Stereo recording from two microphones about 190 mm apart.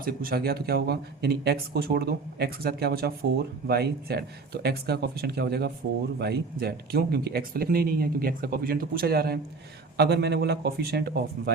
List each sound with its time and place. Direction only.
0.0 s speech: 50° right (ahead or behind)